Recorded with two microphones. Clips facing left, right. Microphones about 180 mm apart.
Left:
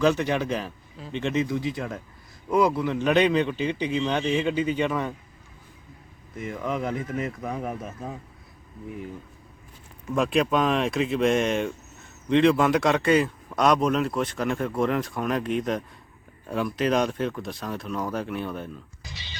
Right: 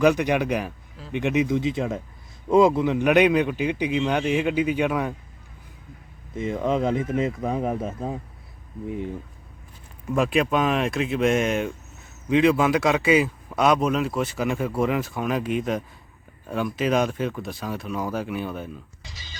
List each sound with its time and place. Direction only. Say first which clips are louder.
0.0 s a man's voice: right 3 dB; 15° right (ahead or behind)
6.3 s speech: right 6 dB; 25° right (ahead or behind)
10.2 s speech: right 1 dB; 5° right (ahead or behind)